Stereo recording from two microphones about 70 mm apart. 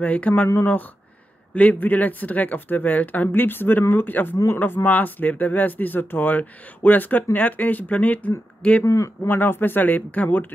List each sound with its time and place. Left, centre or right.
0.0 s speech: left
1.5 s speech: left
8.8 s speech: left
9.3 s speech: left